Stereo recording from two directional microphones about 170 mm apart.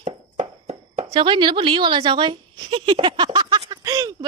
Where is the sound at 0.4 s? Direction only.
35° right (ahead or behind).